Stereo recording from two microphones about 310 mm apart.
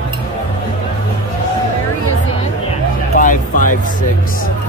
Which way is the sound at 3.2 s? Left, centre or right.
Left.